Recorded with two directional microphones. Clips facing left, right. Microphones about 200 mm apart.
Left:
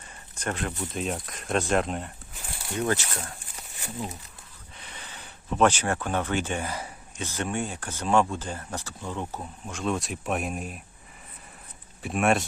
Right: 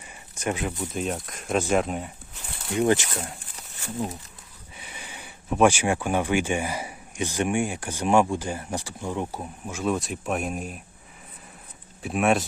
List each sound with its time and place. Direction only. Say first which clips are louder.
0.1 s speech: right 4 dB; 10° right (ahead or behind)
2.7 s speech: right 6 dB; 20° right (ahead or behind)
4.8 s speech: right 3 dB; 10° right (ahead or behind)
12.0 s speech: right 2 dB; centre (ahead or behind)